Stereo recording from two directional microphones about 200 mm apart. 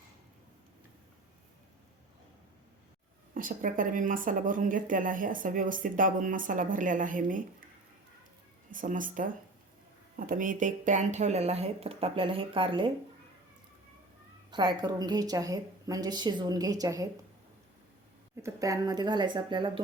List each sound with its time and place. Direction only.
3.3 s speech: 45° right (ahead or behind)
8.7 s speech: 40° right (ahead or behind); by 12.9 s 25° right (ahead or behind)
14.5 s a woman's voice: 20° right (ahead or behind)
18.4 s a woman's voice: 15° right (ahead or behind)